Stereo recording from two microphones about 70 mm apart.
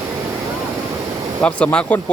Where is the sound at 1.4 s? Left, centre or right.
Centre.